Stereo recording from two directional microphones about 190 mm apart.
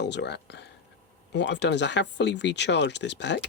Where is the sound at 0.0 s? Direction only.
65° left (ahead or behind).